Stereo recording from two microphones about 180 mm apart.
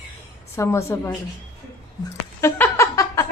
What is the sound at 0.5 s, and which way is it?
Speech, 15° left (ahead or behind).